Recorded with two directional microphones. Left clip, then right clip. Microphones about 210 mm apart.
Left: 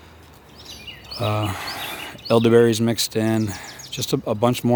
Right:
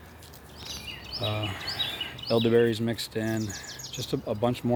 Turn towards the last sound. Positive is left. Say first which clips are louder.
# left 8 dB
turn(degrees=45)  # may be behind; listen again after turning